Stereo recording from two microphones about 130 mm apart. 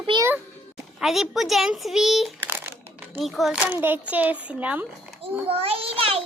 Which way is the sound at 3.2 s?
Centre (ahead or behind).